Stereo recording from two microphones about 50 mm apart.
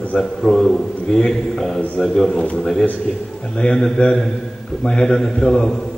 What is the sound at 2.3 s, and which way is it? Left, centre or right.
Speech, left.